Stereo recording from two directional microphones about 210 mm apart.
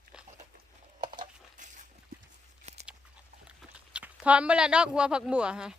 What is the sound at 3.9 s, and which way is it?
Speech, 5° right (ahead or behind).